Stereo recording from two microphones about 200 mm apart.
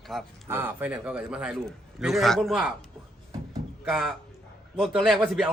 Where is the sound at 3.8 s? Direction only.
Centre (ahead or behind).